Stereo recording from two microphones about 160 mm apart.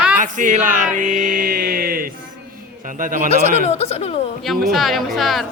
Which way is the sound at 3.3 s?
40° left (ahead or behind).